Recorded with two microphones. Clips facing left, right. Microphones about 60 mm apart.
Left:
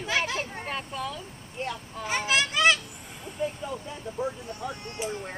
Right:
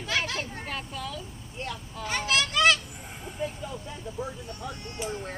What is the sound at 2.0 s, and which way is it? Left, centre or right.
Speech, centre.